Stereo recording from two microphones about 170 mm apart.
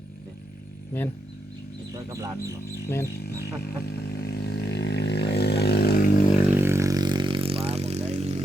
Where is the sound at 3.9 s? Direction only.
75° left (ahead or behind).